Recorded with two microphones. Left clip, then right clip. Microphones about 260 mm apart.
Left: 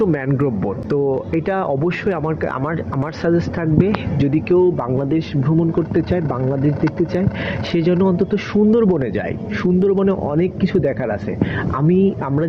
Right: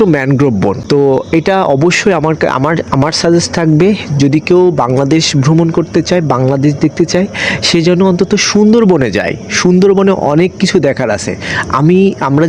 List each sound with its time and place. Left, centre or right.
0.0 s speech: right